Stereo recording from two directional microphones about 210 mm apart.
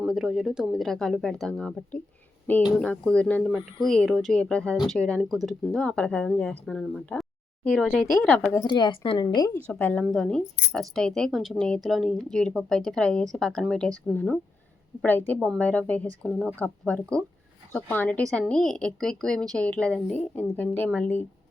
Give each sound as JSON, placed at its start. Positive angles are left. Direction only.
{"t": 0.0, "sound": "a woman's voice", "side_deg": 0}
{"t": 8.6, "sound": "a woman's voice", "side_deg": 20}
{"t": 9.7, "sound": "a woman's voice", "side_deg": 5}